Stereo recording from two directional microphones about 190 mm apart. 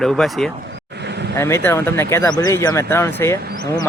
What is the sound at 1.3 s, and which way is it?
Speech, 15° left (ahead or behind).